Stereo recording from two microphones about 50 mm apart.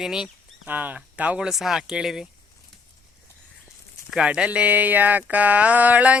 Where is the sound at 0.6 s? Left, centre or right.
Right.